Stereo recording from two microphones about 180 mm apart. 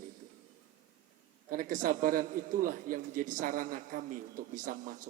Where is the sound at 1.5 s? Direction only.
50° right (ahead or behind).